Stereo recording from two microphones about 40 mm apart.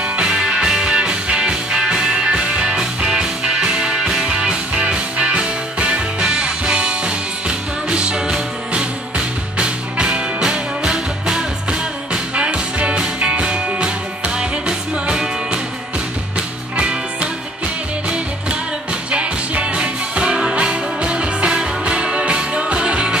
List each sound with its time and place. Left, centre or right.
0.2 s music: centre
0.9 s music: right
4.3 s music: right
19.0 s music: right